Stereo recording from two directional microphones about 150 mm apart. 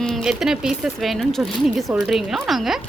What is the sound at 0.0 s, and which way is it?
Speech, centre (ahead or behind).